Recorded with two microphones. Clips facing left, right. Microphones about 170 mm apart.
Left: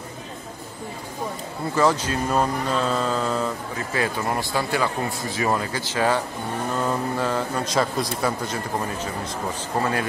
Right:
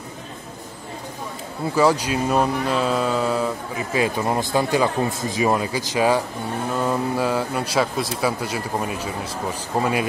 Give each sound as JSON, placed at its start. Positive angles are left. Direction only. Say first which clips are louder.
{"t": 1.8, "sound": "a man's voice", "louder": "right 2 dB", "side_deg": -10}